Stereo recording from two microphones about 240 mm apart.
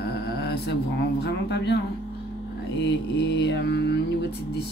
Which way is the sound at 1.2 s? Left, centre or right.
Left.